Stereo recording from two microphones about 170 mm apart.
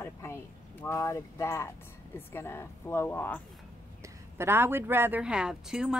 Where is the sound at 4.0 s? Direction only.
15° right (ahead or behind).